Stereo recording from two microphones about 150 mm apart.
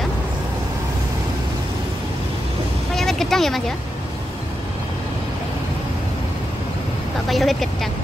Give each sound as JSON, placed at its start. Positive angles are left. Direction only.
{"t": 2.9, "sound": "vehicle", "side_deg": 0}
{"t": 7.2, "sound": "speech", "side_deg": 0}